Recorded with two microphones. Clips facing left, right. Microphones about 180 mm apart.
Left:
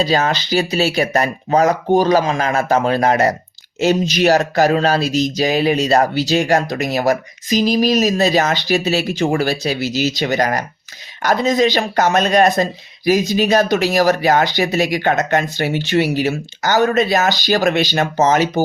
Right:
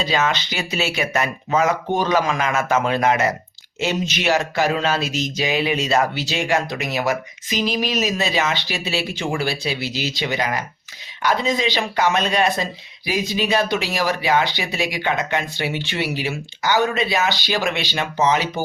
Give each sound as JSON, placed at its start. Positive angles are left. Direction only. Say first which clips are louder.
{"t": 0.0, "sound": "speech", "louder": "left 4 dB", "side_deg": 35}